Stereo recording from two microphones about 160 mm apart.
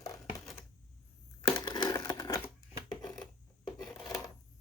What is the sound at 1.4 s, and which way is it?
Crushing, 25° left (ahead or behind).